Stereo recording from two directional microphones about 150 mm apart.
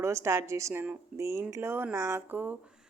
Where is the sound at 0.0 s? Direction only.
20° right (ahead or behind).